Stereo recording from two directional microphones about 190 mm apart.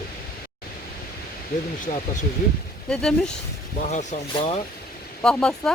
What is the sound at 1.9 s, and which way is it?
Speech, 40° left (ahead or behind).